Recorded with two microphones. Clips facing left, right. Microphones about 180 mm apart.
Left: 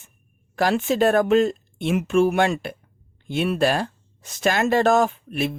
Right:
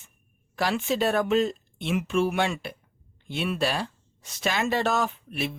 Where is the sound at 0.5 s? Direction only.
45° left (ahead or behind).